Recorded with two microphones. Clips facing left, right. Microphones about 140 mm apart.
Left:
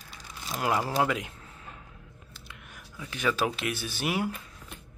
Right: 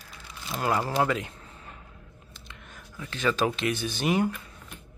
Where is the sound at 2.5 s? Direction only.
10° left (ahead or behind).